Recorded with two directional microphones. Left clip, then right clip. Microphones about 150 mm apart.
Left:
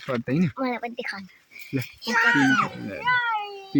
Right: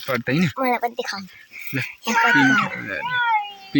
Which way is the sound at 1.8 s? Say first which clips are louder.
Right 3 dB; 20° right (ahead or behind).